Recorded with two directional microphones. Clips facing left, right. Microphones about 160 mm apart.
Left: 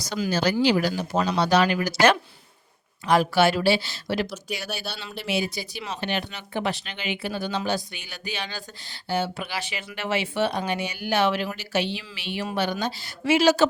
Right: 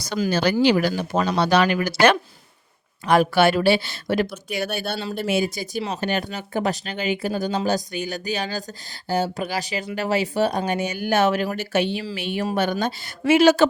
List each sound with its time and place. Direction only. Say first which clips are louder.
0.0 s a woman's voice: right 3 dB; 60° right (ahead or behind)
4.9 s a woman's voice: right 5 dB; 40° right (ahead or behind); by 13.7 s 55° right (ahead or behind)